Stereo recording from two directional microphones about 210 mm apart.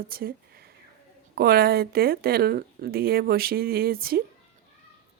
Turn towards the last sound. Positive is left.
turn(degrees=-45)  # may be behind; listen again after turning